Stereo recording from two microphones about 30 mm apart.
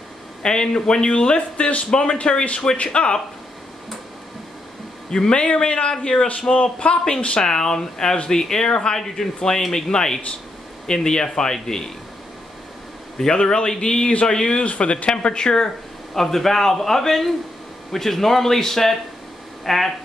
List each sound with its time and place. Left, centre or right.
0.4 s a man's voice: left
5.3 s a man's voice: left
7.3 s a man's voice: left
8.9 s a man's voice: centre
13.2 s speech: left
14.7 s speech: left
16.2 s a man's voice: centre